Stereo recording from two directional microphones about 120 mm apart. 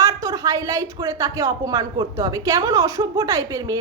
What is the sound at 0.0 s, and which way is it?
Speech, 25° right (ahead or behind).